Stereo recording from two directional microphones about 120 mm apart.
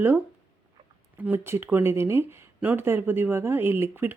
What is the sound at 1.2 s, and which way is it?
Speech, 20° right (ahead or behind).